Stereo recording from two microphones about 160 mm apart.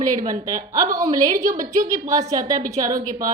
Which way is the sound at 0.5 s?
20° right (ahead or behind).